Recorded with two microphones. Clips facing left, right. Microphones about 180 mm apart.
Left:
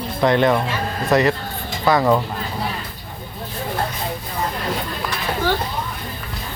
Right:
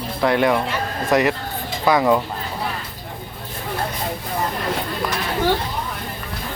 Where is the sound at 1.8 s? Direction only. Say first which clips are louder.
Even; centre (ahead or behind).